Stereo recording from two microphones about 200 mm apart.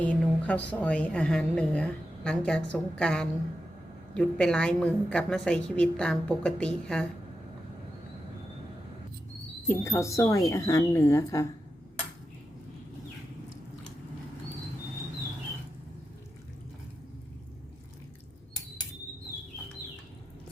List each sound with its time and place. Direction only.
0.0 s a woman's voice: 5° left (ahead or behind)
9.6 s a woman's voice: 15° left (ahead or behind)